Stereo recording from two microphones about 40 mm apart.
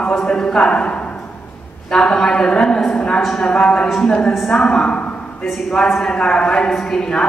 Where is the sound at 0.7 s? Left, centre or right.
Left.